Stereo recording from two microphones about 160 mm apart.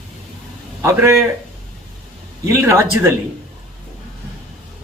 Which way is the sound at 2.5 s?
15° right (ahead or behind).